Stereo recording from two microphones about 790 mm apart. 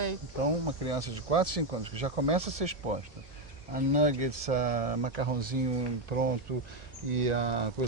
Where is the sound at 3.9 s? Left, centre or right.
Right.